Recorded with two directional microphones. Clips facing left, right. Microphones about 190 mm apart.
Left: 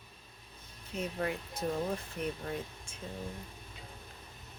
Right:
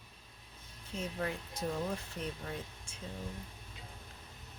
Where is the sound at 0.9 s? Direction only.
60° left (ahead or behind).